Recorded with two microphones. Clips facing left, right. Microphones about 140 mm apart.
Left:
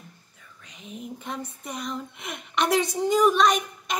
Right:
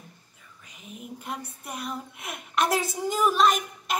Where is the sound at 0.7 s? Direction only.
5° right (ahead or behind).